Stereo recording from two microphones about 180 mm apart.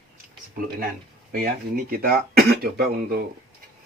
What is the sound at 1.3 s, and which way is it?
Speech, 55° right (ahead or behind).